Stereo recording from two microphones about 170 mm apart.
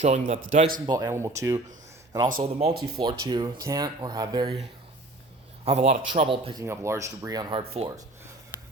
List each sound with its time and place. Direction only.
0.0 s speech: 40° right (ahead or behind)
0.9 s speech: 20° right (ahead or behind)
2.4 s speech: 35° right (ahead or behind)
3.0 s speech: 25° right (ahead or behind)
5.6 s speech: 40° right (ahead or behind)
6.6 s speech: 15° right (ahead or behind)
7.6 s speech: 35° right (ahead or behind)